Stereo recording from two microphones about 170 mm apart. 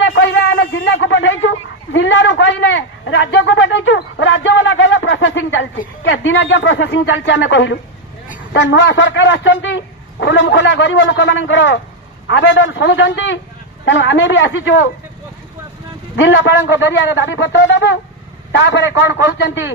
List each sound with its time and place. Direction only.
0.0 s a sound: 90° left
6.0 s a man's voice: 90° left
16.2 s a man's voice: 90° left